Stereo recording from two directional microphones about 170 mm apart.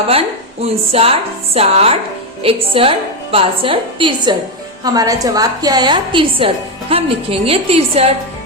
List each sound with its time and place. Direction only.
0.1 s a woman's voice: 35° right (ahead or behind)